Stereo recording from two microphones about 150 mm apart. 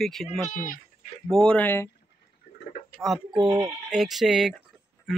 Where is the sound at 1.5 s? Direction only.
15° left (ahead or behind).